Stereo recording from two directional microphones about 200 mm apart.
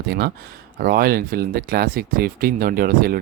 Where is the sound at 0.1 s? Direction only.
55° right (ahead or behind).